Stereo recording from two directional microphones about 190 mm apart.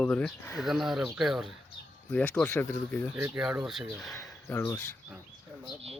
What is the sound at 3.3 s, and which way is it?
Speech, 5° right (ahead or behind).